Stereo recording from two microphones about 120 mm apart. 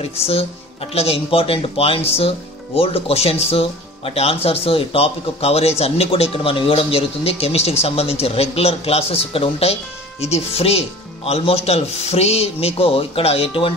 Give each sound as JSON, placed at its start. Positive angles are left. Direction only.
{"t": 0.0, "sound": "speech", "side_deg": 55}